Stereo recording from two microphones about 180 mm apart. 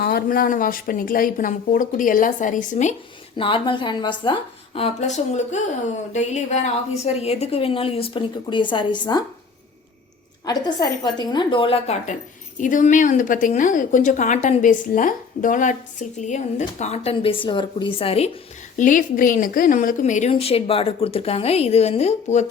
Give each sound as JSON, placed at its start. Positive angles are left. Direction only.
{"t": 0.0, "sound": "a woman's voice", "side_deg": 60}
{"t": 3.3, "sound": "a woman's voice", "side_deg": 30}
{"t": 10.4, "sound": "a woman's voice", "side_deg": 20}
{"t": 12.5, "sound": "a woman's voice", "side_deg": 45}
{"t": 18.8, "sound": "a woman's voice", "side_deg": 45}